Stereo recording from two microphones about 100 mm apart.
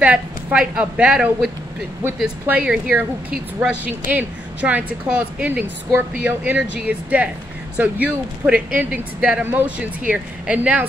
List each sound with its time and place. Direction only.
0.0 s a woman's voice: 15° right (ahead or behind)
2.4 s a woman's voice: 10° right (ahead or behind)